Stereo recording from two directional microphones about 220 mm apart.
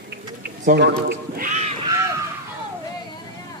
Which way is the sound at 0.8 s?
50° right (ahead or behind).